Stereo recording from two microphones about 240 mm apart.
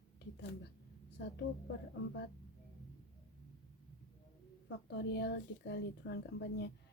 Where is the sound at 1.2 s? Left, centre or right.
Left.